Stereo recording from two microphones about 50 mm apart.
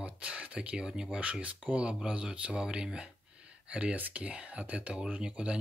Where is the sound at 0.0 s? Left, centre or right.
Right.